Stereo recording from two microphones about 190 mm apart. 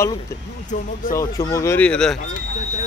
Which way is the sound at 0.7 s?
45° left (ahead or behind).